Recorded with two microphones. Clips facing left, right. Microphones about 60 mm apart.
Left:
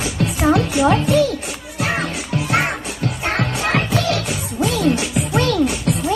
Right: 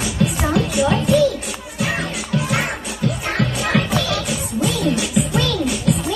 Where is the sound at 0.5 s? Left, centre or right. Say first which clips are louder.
Left 5 dB; left.